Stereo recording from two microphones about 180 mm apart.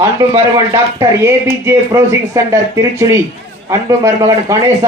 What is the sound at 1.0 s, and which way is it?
Speech, 15° right (ahead or behind).